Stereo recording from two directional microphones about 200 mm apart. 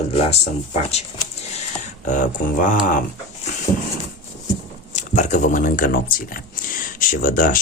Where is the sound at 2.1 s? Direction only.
40° left (ahead or behind).